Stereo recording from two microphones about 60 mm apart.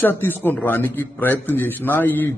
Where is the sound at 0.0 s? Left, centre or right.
Left.